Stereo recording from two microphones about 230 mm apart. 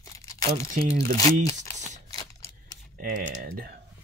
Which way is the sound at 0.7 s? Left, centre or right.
Right.